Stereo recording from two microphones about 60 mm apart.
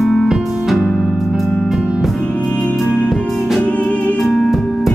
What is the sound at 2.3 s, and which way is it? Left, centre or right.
Music, centre.